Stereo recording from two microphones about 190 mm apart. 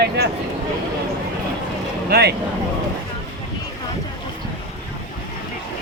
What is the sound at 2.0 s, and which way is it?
Speech, 55° right (ahead or behind).